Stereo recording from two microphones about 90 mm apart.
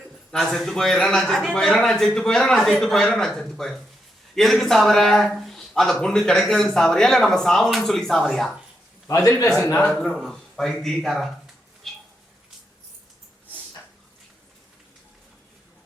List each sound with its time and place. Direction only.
0.3 s a man's voice: 5° left (ahead or behind)
9.1 s a man's voice: 30° left (ahead or behind)
10.0 s a man's voice: 5° left (ahead or behind)
11.9 s a sound: 5° left (ahead or behind)